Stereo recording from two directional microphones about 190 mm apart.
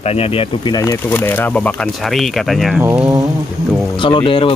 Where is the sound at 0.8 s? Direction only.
15° left (ahead or behind).